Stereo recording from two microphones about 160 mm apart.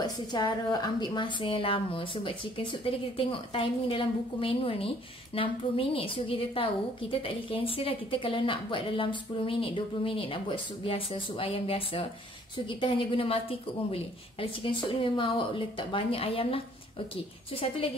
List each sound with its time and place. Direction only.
0.0 s a woman's voice: 25° left (ahead or behind)